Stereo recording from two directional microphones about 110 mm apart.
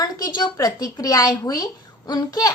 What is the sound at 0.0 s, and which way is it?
A woman's voice, 35° left (ahead or behind).